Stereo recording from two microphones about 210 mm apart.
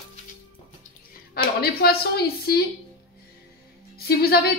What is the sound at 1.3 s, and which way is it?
Speech, 50° left (ahead or behind).